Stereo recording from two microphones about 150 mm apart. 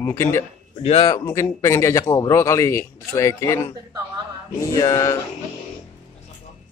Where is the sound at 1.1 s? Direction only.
20° left (ahead or behind).